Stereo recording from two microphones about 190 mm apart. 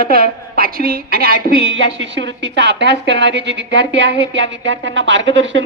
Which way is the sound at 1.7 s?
75° right (ahead or behind).